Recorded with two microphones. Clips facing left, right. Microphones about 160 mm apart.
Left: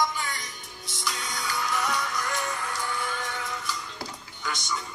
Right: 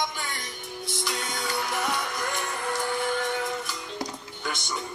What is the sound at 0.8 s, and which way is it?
Music, 55° right (ahead or behind).